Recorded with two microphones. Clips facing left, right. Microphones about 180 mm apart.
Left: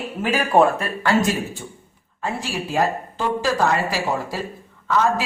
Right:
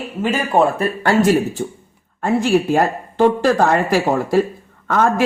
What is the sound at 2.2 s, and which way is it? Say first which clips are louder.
Speech: right 11 dB; 50° right (ahead or behind).